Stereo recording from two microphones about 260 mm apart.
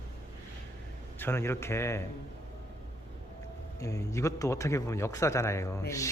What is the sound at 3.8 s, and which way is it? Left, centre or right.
A man's voice, centre.